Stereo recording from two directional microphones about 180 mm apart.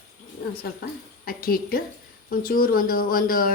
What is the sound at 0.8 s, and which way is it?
Speech, 55° left (ahead or behind).